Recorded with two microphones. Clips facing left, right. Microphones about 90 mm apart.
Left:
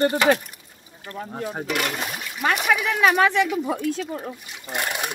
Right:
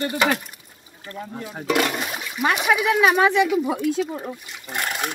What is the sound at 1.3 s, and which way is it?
Speech, 40° left (ahead or behind).